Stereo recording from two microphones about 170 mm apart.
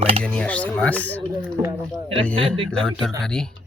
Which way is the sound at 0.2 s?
5° left (ahead or behind).